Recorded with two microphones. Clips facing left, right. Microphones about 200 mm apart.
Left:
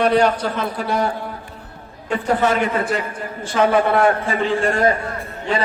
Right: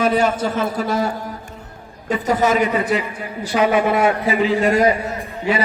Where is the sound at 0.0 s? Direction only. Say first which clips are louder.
Left 1 dB; 5° right (ahead or behind).